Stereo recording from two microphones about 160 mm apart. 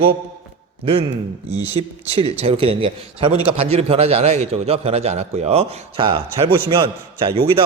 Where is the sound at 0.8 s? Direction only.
35° right (ahead or behind).